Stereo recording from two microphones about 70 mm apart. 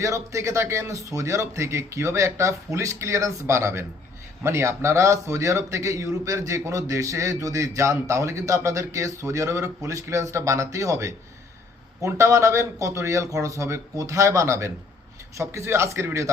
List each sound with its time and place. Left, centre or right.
0.0 s a man's voice: right